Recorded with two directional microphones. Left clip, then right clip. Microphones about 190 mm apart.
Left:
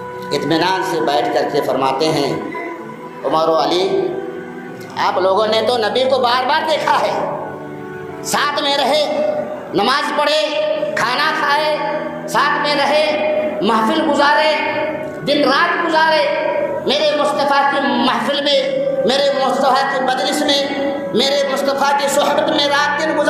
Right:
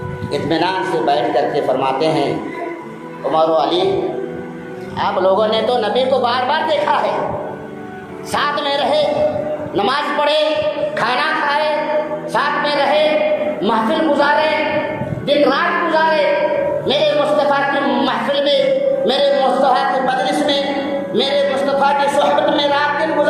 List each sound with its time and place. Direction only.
0.3 s a man's voice: 30° left (ahead or behind)
3.3 s a man's voice: 35° left (ahead or behind)
4.9 s a man's voice: 40° left (ahead or behind)
8.3 s a man's voice: 40° left (ahead or behind)
10.9 s music: 30° left (ahead or behind)
13.6 s a sound: 30° left (ahead or behind)
15.3 s music: 30° left (ahead or behind)
16.8 s a sound: 35° left (ahead or behind)
18.0 s music: 30° left (ahead or behind)
19.0 s a sound: 30° left (ahead or behind)
21.1 s music: 30° left (ahead or behind)